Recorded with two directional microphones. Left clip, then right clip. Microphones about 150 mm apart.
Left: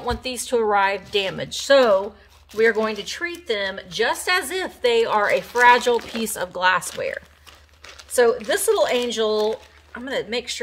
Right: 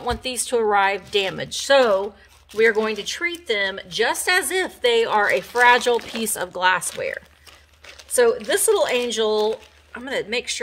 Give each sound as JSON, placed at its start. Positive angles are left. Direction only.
{"t": 0.0, "sound": "a woman's voice", "side_deg": -40}